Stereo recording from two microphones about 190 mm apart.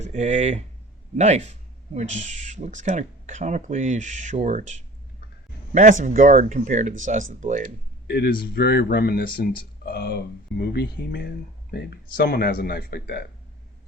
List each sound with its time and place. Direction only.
0.0 s speech: 35° right (ahead or behind)
8.0 s speech: 60° left (ahead or behind)